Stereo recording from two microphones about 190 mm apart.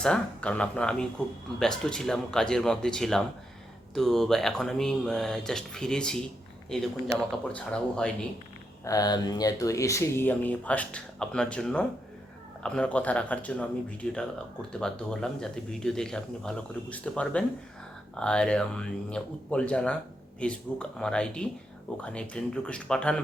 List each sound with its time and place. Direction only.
0.0 s a man's voice: 5° left (ahead or behind)
8.8 s a man's voice: 20° left (ahead or behind)